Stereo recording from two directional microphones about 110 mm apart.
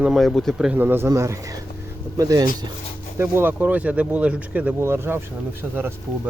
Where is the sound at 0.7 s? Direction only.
20° right (ahead or behind).